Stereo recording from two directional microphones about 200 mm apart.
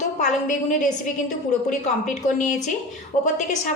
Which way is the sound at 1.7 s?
40° left (ahead or behind).